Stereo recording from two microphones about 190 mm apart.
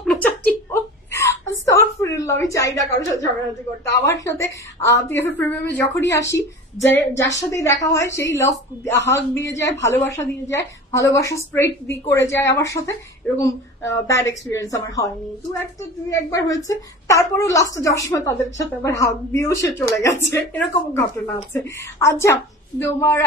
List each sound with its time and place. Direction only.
0.0 s a sound: 5° left (ahead or behind)
1.1 s whimper: 15° left (ahead or behind)
3.9 s a woman's voice: 15° left (ahead or behind)
16.1 s a woman's voice: 15° left (ahead or behind)